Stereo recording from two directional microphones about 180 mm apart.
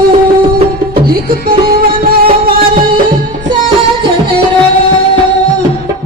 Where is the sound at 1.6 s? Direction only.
55° right (ahead or behind).